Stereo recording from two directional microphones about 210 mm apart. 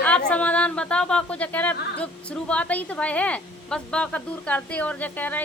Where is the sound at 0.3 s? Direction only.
5° left (ahead or behind).